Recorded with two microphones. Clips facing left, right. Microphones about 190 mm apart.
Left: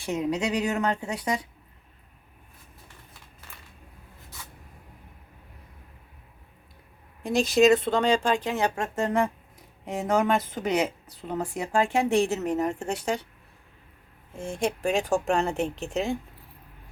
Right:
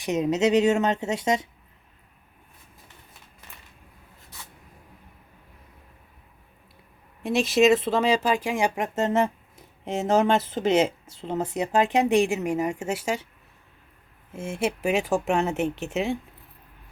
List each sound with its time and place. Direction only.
0.0 s a woman's voice: 20° right (ahead or behind)
7.2 s a woman's voice: centre (ahead or behind)
14.3 s speech: 5° right (ahead or behind)